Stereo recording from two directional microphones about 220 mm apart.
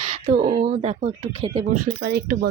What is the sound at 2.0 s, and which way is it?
Speech, 45° right (ahead or behind).